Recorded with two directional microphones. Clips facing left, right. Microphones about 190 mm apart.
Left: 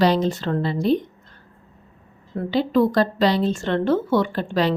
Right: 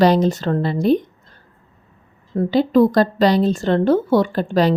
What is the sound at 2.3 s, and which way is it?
A woman's voice, 40° right (ahead or behind).